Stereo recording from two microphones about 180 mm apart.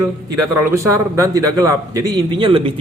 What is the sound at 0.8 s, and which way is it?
A man's voice, 20° right (ahead or behind).